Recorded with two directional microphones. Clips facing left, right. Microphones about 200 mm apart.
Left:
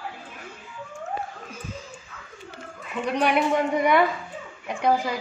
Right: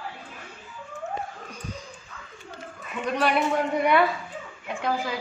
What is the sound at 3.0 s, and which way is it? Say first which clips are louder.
Speech: left 1 dB; 15° left (ahead or behind).